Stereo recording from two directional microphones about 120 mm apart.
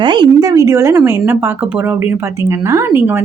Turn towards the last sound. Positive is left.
turn(degrees=-20)  # may be behind; listen again after turning